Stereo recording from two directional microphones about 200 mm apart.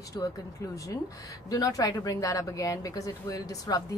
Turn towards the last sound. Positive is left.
turn(degrees=20)  # may be behind; listen again after turning